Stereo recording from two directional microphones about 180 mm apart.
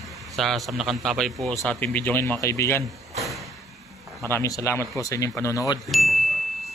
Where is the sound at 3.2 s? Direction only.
Centre (ahead or behind).